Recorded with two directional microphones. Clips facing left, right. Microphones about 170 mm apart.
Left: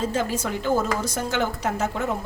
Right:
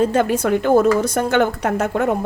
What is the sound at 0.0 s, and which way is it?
A woman's voice, 60° right (ahead or behind).